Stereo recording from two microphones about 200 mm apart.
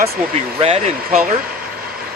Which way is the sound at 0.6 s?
35° right (ahead or behind).